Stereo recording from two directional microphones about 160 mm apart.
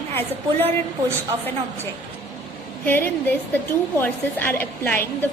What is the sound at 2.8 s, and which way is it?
A woman's voice, 10° left (ahead or behind).